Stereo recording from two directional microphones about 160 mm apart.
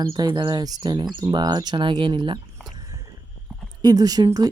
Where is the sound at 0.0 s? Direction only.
30° right (ahead or behind).